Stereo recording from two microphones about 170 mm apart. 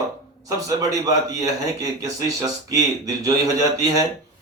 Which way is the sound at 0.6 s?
20° right (ahead or behind).